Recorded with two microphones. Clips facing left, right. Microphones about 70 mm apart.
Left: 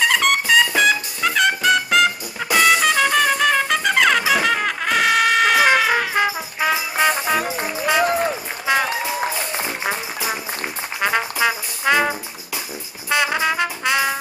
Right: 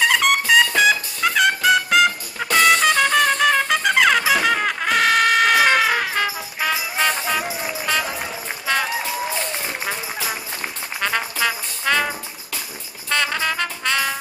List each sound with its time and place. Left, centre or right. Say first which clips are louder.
0.0 s music: even; centre
6.1 s music: left 3 dB; centre
8.7 s run: left 3 dB; centre
11.0 s trombone: left 3 dB; centre
13.1 s music: left 3 dB; centre